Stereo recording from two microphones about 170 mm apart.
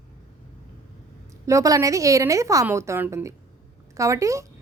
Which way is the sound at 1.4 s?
20° right (ahead or behind).